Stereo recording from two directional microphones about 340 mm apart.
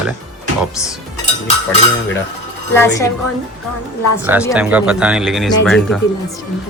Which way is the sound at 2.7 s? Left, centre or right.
Centre.